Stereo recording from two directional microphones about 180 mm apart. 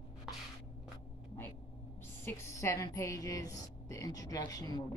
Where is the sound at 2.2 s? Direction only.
15° left (ahead or behind).